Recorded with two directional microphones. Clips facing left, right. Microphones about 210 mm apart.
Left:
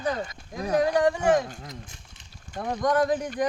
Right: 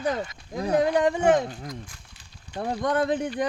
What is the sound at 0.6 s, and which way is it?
Speech, 25° right (ahead or behind).